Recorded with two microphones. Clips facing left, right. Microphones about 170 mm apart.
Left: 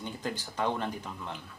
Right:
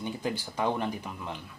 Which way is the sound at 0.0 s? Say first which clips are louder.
Right 4 dB; 10° right (ahead or behind).